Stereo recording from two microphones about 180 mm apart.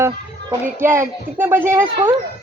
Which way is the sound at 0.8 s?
15° right (ahead or behind).